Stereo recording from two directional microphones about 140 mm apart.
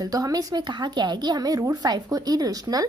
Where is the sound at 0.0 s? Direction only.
25° right (ahead or behind).